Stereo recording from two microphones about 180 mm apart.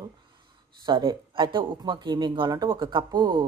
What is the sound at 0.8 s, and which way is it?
Speech, 25° right (ahead or behind).